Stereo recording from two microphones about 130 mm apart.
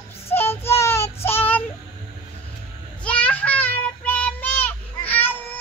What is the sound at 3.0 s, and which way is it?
Child singing, 10° left (ahead or behind).